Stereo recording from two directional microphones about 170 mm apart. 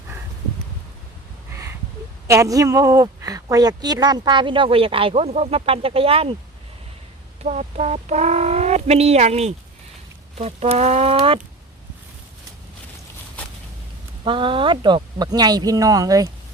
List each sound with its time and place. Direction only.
2.2 s a woman's voice: 20° right (ahead or behind)
7.4 s speech: 45° right (ahead or behind)
14.3 s a woman's voice: 30° right (ahead or behind)